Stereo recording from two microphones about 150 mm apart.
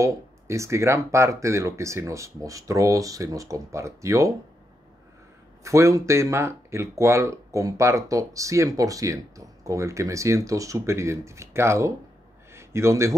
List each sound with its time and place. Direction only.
0.0 s speech: 20° right (ahead or behind)
5.6 s a man's voice: 20° right (ahead or behind)